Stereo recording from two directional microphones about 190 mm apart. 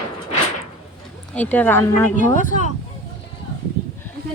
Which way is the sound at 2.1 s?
40° left (ahead or behind).